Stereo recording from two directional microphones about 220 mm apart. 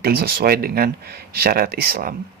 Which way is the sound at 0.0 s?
45° right (ahead or behind).